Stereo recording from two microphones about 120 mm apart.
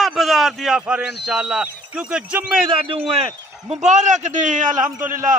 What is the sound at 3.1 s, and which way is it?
Speech, 55° right (ahead or behind).